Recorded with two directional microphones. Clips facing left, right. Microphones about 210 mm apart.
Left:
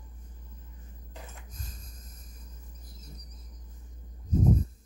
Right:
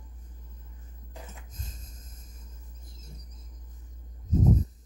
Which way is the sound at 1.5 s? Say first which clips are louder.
Right 1 dB; 25° right (ahead or behind).